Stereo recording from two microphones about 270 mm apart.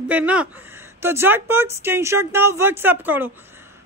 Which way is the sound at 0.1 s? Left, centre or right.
Centre.